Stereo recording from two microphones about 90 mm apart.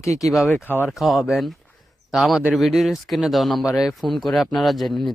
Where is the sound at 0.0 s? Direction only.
35° left (ahead or behind).